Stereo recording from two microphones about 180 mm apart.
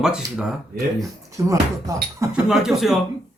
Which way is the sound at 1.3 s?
15° right (ahead or behind).